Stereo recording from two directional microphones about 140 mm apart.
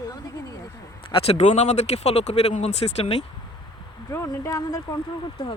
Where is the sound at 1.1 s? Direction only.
45° left (ahead or behind).